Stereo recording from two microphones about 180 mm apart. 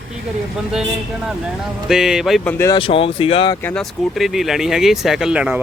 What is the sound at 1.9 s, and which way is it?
Speech, 5° right (ahead or behind).